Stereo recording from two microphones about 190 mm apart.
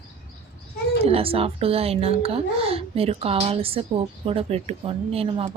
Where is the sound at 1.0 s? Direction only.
30° right (ahead or behind).